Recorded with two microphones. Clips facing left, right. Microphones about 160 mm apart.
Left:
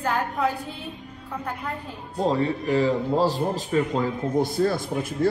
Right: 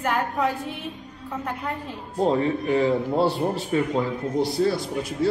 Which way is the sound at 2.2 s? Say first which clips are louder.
Right 2 dB; 35° left (ahead or behind).